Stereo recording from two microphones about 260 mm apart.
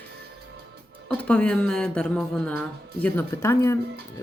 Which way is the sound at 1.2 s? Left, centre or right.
Centre.